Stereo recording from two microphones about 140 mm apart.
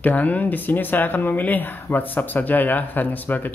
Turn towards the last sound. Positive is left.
turn(degrees=10)  # may be behind; listen again after turning